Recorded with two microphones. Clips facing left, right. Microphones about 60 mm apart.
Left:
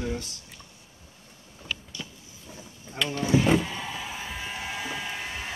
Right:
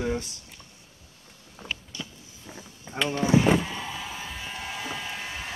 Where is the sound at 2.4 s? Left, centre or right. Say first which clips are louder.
Right 2 dB; right.